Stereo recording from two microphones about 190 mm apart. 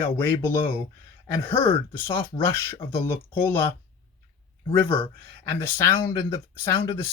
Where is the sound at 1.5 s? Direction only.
30° left (ahead or behind).